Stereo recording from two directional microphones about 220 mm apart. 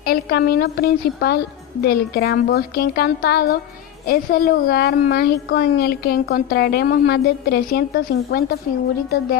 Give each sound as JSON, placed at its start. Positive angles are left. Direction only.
{"t": 0.0, "sound": "a child's voice", "side_deg": 45}